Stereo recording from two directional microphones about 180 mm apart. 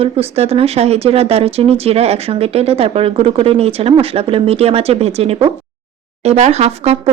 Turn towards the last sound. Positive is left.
turn(degrees=-35)  # may be behind; listen again after turning